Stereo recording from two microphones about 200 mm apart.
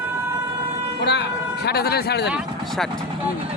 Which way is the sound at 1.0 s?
60° left (ahead or behind).